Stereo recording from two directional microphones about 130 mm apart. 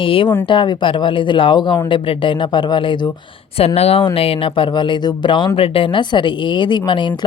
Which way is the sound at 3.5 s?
50° left (ahead or behind).